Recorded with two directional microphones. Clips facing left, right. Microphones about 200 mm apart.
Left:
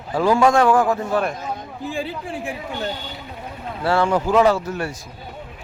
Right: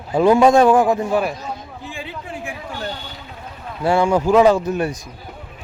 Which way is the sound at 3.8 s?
15° right (ahead or behind).